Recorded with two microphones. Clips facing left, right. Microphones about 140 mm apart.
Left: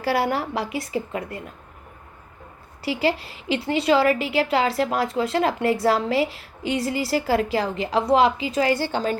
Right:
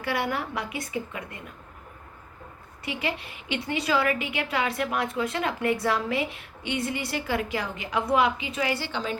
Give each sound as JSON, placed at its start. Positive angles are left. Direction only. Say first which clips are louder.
{"t": 0.0, "sound": "a woman's voice", "louder": "left 6 dB", "side_deg": 30}
{"t": 2.8, "sound": "a woman's voice", "louder": "left 8 dB", "side_deg": 30}
{"t": 6.7, "sound": "a woman's voice", "louder": "left 6 dB", "side_deg": -25}
{"t": 7.2, "sound": "a woman's voice", "louder": "left 7 dB", "side_deg": 35}